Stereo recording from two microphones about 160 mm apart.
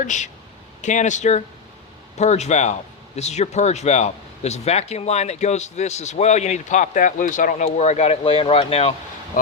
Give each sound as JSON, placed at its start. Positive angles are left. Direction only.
{"t": 0.0, "sound": "speech", "side_deg": 50}